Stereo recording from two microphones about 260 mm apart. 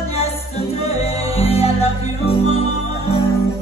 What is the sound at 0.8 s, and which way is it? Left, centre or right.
Music, left.